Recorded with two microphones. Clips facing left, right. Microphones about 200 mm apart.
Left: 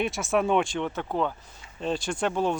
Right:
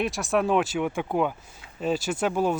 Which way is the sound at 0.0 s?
Centre (ahead or behind).